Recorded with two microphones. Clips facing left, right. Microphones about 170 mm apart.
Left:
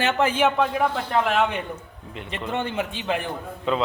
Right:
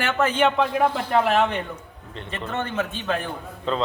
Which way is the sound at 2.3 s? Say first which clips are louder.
Left 1 dB; 15° left (ahead or behind).